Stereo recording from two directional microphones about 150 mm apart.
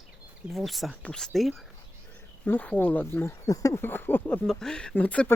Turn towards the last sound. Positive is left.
turn(degrees=10)  # may be behind; listen again after turning